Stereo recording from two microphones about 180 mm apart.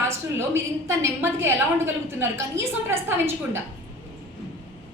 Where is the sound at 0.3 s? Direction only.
15° right (ahead or behind).